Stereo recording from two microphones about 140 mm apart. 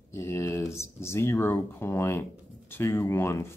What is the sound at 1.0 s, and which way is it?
Speech, 20° left (ahead or behind).